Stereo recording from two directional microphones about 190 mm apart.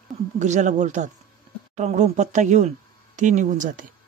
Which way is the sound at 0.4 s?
40° right (ahead or behind).